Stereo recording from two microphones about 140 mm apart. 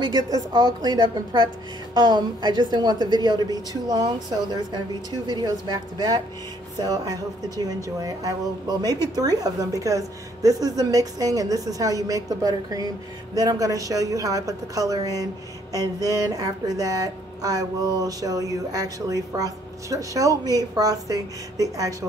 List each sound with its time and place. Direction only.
0.0 s a woman's voice: 30° right (ahead or behind)